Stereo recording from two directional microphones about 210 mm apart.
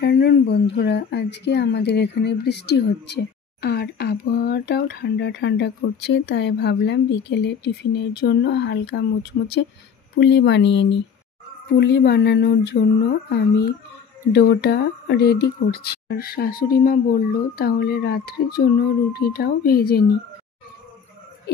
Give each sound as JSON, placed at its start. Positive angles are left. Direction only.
{"t": 0.0, "sound": "speech", "side_deg": 50}
{"t": 14.3, "sound": "speech", "side_deg": 50}